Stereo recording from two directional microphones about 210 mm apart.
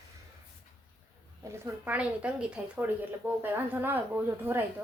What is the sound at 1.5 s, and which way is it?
Speech, 5° right (ahead or behind).